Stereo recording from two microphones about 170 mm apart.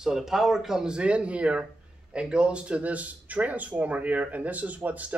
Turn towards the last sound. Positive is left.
turn(degrees=-10)  # may be behind; listen again after turning